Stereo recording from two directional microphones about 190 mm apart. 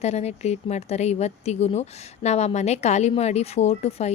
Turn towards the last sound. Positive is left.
turn(degrees=35)  # may be behind; listen again after turning